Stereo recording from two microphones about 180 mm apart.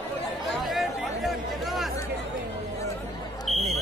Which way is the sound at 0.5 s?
Centre (ahead or behind).